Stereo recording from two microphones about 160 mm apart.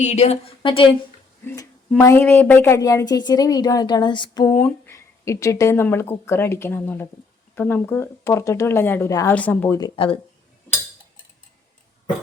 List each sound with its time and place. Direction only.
0.0 s a woman's voice: 45° left (ahead or behind)
1.9 s a woman's voice: 15° left (ahead or behind)
4.4 s speech: 15° left (ahead or behind)
9.7 s a woman's voice: 30° left (ahead or behind)